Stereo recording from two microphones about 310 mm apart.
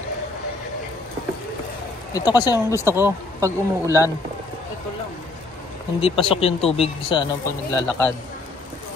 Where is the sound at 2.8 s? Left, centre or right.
Centre.